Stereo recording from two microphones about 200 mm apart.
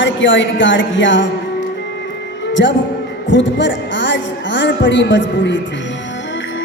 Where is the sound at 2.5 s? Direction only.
65° left (ahead or behind).